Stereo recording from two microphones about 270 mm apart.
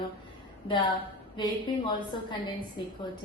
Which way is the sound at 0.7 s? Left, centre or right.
Centre.